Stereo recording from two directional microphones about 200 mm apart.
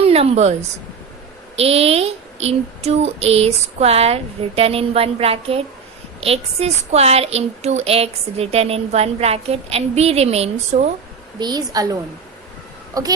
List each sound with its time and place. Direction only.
0.1 s a woman's voice: 30° right (ahead or behind)
1.5 s a woman's voice: 30° right (ahead or behind)
11.3 s a woman's voice: 20° right (ahead or behind)